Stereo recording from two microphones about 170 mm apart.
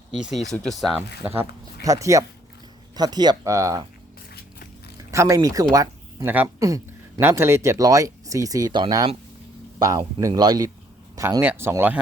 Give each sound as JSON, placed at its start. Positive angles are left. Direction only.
{"t": 0.3, "sound": "speech", "side_deg": 0}
{"t": 1.3, "sound": "speech", "side_deg": -15}
{"t": 5.1, "sound": "speech", "side_deg": -15}